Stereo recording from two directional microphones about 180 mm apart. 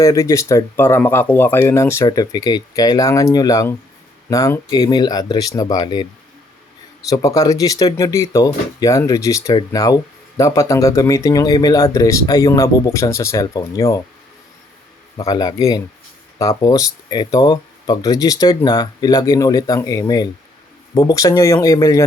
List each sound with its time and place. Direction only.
0.0 s speech: 20° left (ahead or behind)
7.1 s speech: 20° left (ahead or behind)
15.2 s speech: 20° left (ahead or behind)